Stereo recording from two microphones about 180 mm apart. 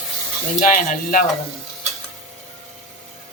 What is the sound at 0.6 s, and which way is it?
Speech, 50° left (ahead or behind).